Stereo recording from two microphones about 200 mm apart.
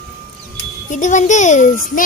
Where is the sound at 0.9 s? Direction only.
40° left (ahead or behind).